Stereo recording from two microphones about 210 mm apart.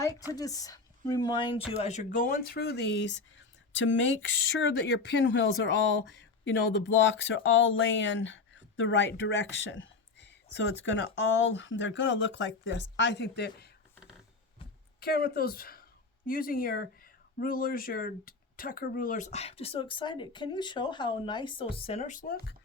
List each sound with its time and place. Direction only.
0.1 s a woman's voice: 15° right (ahead or behind)
0.3 s speech: 15° left (ahead or behind); by 13.7 s 55° left (ahead or behind)
15.0 s speech: 50° left (ahead or behind)